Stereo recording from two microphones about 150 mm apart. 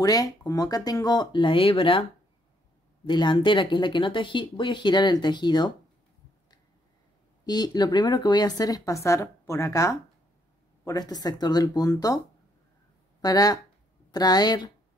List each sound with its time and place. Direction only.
0.0 s a woman's voice: 25° left (ahead or behind)
3.1 s speech: 30° left (ahead or behind)
7.4 s a woman's voice: 25° left (ahead or behind)
13.2 s a woman's voice: 25° left (ahead or behind)